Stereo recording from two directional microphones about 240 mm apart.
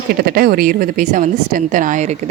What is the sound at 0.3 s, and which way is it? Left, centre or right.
A woman's voice, right.